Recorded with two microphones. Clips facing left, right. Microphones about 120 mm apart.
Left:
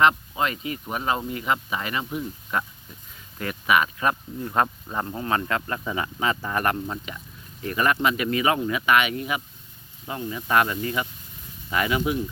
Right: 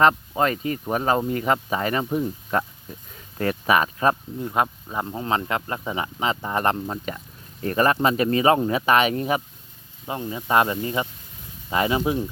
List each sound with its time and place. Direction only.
0.0 s speech: 40° right (ahead or behind)
4.4 s speech: 10° right (ahead or behind)
7.6 s speech: 40° right (ahead or behind)
10.1 s speech: 25° right (ahead or behind)